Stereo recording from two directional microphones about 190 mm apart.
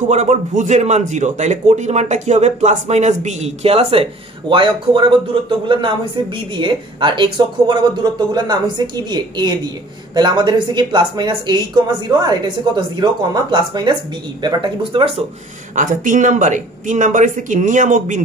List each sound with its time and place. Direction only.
0.1 s a man's voice: 40° right (ahead or behind)
15.7 s a man's voice: 45° right (ahead or behind)